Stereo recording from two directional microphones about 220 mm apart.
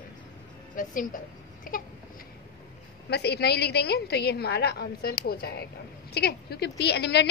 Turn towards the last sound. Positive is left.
turn(degrees=50)  # may be behind; listen again after turning